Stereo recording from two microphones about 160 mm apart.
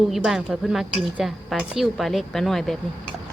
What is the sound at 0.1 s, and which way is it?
A woman's voice, centre (ahead or behind).